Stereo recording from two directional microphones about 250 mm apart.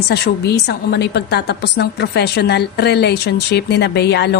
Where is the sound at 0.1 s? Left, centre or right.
Left.